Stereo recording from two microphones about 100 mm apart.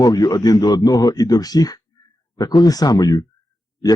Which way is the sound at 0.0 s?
40° left (ahead or behind).